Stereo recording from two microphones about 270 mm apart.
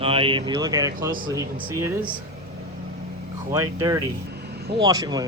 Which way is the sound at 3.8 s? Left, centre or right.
Centre.